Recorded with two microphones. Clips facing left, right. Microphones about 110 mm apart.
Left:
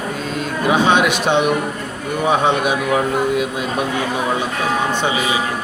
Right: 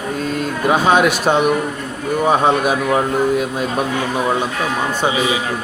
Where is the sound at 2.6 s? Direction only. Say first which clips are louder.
Right 1 dB; 40° right (ahead or behind).